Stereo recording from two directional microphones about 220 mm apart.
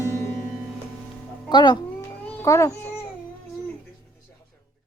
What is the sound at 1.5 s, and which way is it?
Speech, 20° left (ahead or behind).